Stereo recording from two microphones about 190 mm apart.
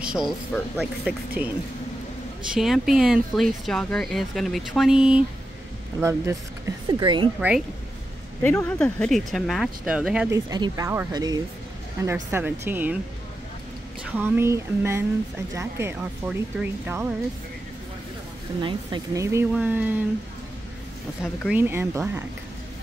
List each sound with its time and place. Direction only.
0.1 s speech: centre (ahead or behind)
2.5 s speech: centre (ahead or behind)
5.9 s speech: 15° right (ahead or behind)
6.9 s speech: 25° right (ahead or behind)
7.3 s speech: 5° right (ahead or behind)
8.4 s speech: 10° left (ahead or behind); by 10.4 s 5° right (ahead or behind)
10.5 s speech: 20° right (ahead or behind)
14.1 s speech: 10° right (ahead or behind)
18.6 s speech: 25° right (ahead or behind); by 20.0 s 10° right (ahead or behind)
21.5 s speech: 10° right (ahead or behind)